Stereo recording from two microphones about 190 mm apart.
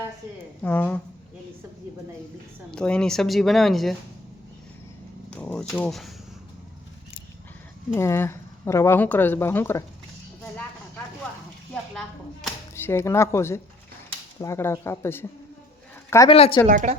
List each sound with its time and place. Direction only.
0.6 s speech: 10° left (ahead or behind)
2.7 s speech: 5° left (ahead or behind)
5.3 s speech: 5° left (ahead or behind)
7.9 s speech: 15° left (ahead or behind)
11.7 s a sound: centre (ahead or behind)
12.7 s a woman's voice: 15° left (ahead or behind)
16.3 s a woman's voice: 30° left (ahead or behind)
16.6 s speech: 40° right (ahead or behind)